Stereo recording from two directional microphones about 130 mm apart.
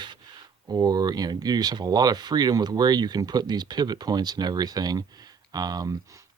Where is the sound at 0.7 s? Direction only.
30° right (ahead or behind).